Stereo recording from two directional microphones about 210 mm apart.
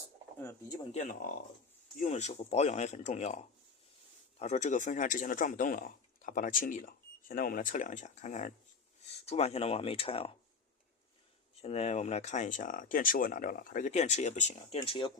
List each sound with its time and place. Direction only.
0.9 s speech: 40° left (ahead or behind)
11.6 s speech: 30° left (ahead or behind)